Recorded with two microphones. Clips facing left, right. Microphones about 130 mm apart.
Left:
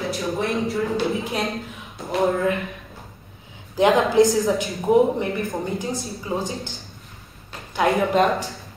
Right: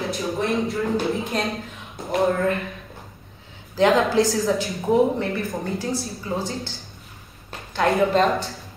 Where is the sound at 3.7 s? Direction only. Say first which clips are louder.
Left 1 dB; 20° left (ahead or behind).